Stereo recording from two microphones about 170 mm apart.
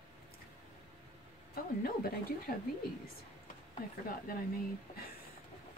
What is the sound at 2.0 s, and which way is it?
Speech, 55° left (ahead or behind).